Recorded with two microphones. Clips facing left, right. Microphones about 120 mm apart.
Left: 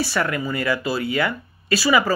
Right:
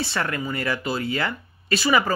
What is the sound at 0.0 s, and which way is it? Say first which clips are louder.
Speech: left 4 dB; 25° right (ahead or behind).